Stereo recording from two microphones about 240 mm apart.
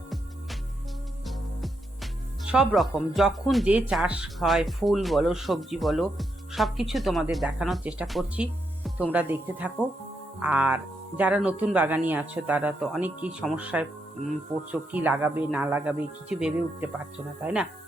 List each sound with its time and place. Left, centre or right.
1.3 s speech: centre